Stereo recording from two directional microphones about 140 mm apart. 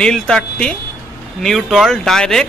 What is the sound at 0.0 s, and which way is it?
Speech, 5° left (ahead or behind).